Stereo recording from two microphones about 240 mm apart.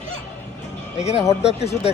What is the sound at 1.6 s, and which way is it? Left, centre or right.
Speech, left.